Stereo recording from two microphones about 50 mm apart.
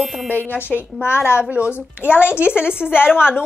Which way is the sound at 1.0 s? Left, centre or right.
Left.